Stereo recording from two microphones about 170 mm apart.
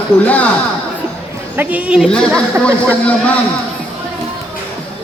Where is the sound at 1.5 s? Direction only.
10° right (ahead or behind).